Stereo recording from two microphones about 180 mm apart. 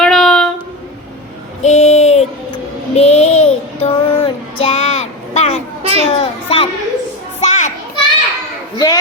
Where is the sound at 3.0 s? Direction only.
35° left (ahead or behind).